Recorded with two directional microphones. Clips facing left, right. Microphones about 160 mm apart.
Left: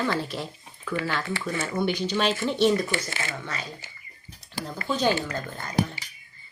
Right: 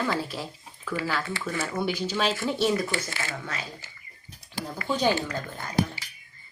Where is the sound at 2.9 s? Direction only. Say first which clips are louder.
Left 1 dB; 20° left (ahead or behind).